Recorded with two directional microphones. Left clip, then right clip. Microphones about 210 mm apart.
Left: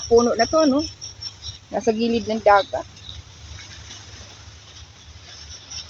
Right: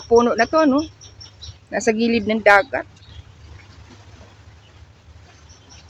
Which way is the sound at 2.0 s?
25° right (ahead or behind).